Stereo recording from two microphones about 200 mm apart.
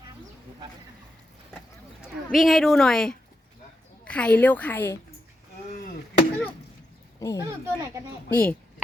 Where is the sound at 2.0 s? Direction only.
Centre (ahead or behind).